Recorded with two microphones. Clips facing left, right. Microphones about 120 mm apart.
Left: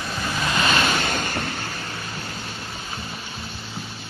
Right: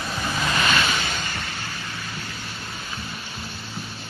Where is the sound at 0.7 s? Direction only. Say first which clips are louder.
Left 3 dB; 45° left (ahead or behind).